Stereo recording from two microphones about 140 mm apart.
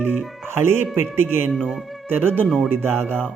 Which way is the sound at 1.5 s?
Centre (ahead or behind).